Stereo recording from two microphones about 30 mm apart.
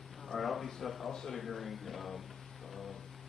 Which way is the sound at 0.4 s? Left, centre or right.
Centre.